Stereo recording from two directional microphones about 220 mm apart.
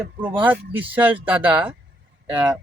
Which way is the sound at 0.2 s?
10° right (ahead or behind).